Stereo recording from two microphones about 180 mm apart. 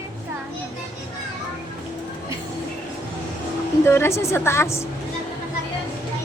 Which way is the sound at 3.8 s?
15° left (ahead or behind).